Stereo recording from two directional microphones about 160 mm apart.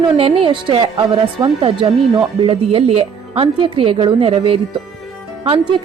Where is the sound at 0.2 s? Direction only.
35° right (ahead or behind).